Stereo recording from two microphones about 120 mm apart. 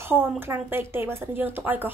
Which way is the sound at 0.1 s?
15° right (ahead or behind).